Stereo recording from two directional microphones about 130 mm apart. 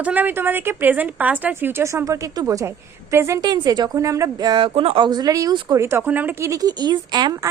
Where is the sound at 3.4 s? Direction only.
30° right (ahead or behind).